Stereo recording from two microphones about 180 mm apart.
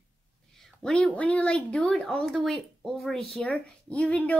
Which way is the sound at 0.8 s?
5° left (ahead or behind).